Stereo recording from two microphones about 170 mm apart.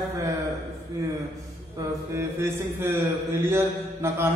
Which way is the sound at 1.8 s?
15° right (ahead or behind).